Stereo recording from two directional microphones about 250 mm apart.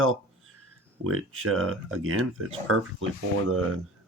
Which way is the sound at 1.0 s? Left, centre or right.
Right.